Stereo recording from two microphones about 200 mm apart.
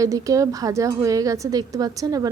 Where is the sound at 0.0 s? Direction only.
15° right (ahead or behind).